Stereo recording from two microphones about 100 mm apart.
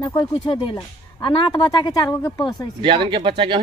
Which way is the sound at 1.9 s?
40° left (ahead or behind).